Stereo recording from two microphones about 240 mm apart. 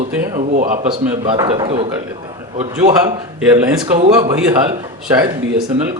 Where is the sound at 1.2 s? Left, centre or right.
Centre.